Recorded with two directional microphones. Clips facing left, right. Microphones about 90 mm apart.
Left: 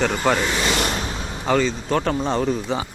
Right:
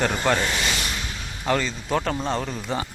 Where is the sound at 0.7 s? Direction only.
60° left (ahead or behind).